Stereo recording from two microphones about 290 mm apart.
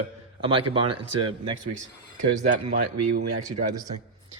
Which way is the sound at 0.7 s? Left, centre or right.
Centre.